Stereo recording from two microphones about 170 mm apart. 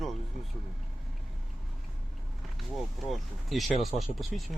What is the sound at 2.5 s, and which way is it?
Speech, centre (ahead or behind).